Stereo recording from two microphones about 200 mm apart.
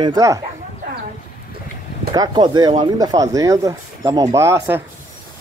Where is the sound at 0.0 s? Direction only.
15° right (ahead or behind).